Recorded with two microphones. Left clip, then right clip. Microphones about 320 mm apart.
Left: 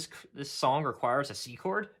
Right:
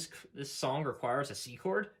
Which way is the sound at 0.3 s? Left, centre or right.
Centre.